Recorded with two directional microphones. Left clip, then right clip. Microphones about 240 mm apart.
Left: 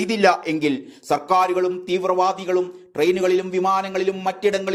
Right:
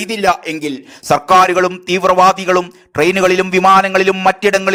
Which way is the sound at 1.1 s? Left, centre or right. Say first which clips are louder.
Right 9 dB; right.